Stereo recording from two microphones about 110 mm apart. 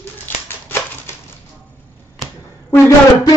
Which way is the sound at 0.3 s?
20° left (ahead or behind).